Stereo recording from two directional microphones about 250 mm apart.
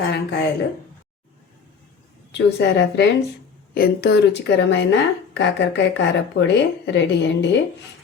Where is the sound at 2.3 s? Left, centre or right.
Left.